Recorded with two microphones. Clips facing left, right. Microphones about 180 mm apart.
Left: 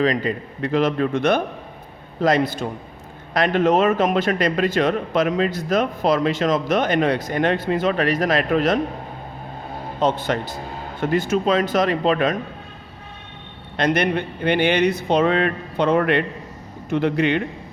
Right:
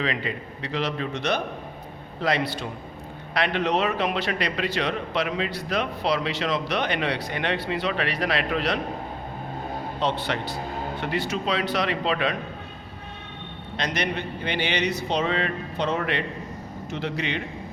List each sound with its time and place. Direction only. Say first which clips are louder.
0.0 s a man's voice: left 8 dB; 40° left (ahead or behind)
10.0 s a man's voice: left 6 dB; 45° left (ahead or behind)
13.7 s speech: left 8 dB; 55° left (ahead or behind)